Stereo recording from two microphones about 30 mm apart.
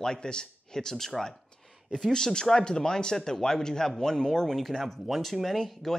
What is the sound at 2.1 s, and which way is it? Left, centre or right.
Speech, left.